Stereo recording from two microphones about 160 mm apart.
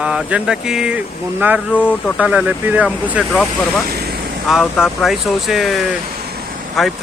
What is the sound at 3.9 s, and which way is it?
Vehicle, 80° right.